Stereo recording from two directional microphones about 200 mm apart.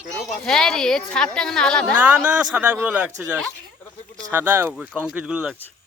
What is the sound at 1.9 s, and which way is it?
A woman's voice, 10° right (ahead or behind).